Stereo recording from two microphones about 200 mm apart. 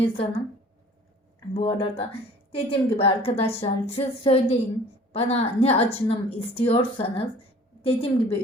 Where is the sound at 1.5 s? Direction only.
30° left (ahead or behind).